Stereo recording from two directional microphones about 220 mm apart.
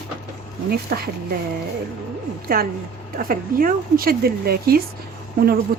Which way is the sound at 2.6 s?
40° right (ahead or behind).